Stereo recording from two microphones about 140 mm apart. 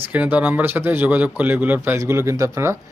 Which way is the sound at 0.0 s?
15° right (ahead or behind).